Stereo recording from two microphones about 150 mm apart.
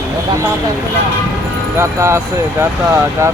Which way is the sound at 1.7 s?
20° right (ahead or behind).